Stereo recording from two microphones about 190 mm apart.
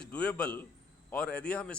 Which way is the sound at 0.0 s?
5° left (ahead or behind).